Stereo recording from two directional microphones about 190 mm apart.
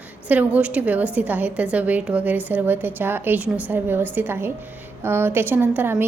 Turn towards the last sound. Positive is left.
turn(degrees=-10)  # may be behind; listen again after turning